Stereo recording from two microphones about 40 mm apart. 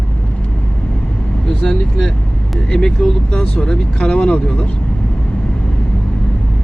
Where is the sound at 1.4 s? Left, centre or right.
Centre.